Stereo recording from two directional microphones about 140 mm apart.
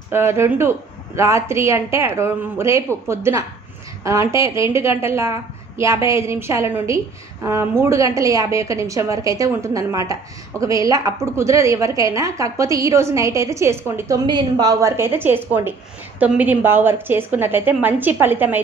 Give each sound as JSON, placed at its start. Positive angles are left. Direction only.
{"t": 0.1, "sound": "a woman's voice", "side_deg": -20}